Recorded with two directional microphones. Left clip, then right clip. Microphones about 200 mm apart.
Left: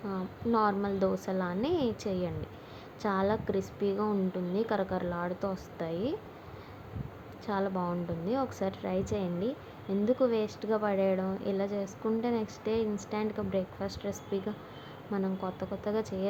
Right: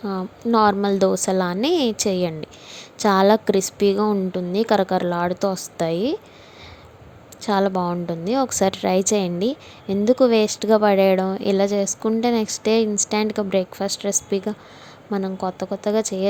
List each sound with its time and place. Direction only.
0.0 s a woman's voice: 40° right (ahead or behind)
7.4 s a woman's voice: 45° right (ahead or behind)